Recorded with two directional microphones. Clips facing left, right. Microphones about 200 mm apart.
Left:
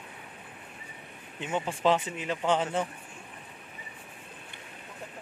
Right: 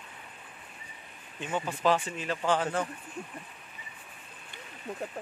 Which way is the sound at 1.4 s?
25° left (ahead or behind).